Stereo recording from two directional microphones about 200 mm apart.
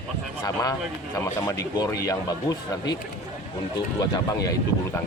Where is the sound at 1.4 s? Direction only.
15° left (ahead or behind).